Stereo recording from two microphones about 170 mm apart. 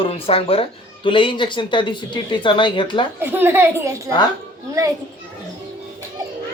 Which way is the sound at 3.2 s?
10° right (ahead or behind).